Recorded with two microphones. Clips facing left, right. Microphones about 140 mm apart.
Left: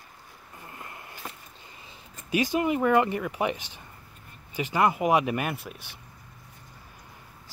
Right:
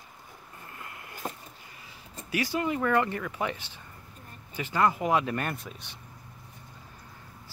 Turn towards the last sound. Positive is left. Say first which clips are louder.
# left 2 dB
turn(degrees=5)  # may be behind; listen again after turning